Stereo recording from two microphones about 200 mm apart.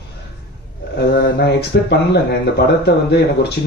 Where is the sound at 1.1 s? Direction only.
55° left (ahead or behind).